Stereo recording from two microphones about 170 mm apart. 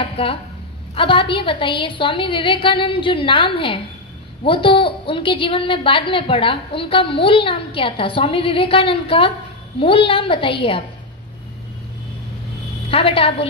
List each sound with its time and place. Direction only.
0.0 s a sound: 30° left (ahead or behind)
0.9 s a woman's voice: 30° left (ahead or behind)
12.9 s a woman's voice: 35° left (ahead or behind)